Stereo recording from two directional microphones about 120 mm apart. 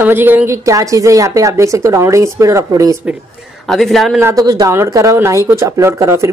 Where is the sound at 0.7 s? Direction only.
25° right (ahead or behind).